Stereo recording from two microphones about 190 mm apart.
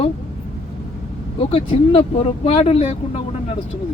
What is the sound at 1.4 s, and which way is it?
Speech, 30° left (ahead or behind).